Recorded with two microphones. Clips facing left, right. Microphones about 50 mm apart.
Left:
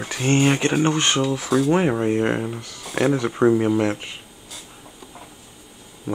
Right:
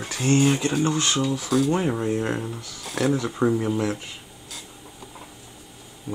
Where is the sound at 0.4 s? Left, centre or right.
Left.